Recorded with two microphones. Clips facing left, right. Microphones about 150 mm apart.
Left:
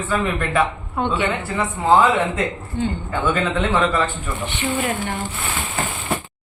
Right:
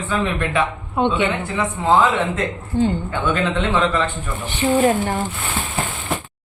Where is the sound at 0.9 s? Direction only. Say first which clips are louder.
Right 3 dB; 20° right (ahead or behind).